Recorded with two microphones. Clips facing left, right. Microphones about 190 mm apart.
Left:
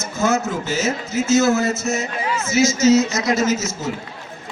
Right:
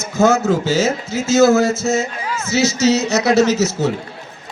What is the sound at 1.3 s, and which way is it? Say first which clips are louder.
A man's voice: right 5 dB; 70° right (ahead or behind).